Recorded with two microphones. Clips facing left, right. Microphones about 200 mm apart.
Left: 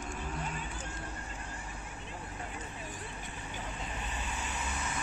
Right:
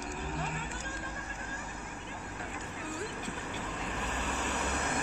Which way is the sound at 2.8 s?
75° right (ahead or behind).